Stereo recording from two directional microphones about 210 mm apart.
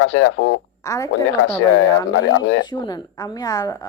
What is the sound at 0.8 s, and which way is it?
Speech, 15° left (ahead or behind).